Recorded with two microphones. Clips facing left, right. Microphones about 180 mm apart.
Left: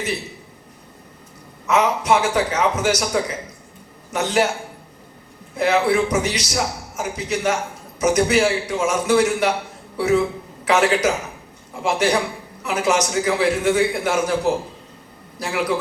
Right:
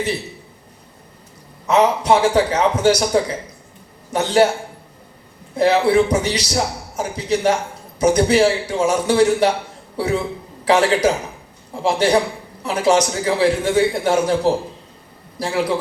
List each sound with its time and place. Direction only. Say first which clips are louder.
1.6 s a man's voice: right 3 dB; 30° right (ahead or behind)
5.5 s a man's voice: right 3 dB; 30° right (ahead or behind)
10.7 s a man's voice: right 2 dB; 30° right (ahead or behind)